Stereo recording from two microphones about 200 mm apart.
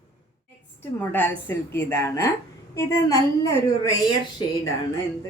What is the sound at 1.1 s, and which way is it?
A woman's voice, 10° left (ahead or behind).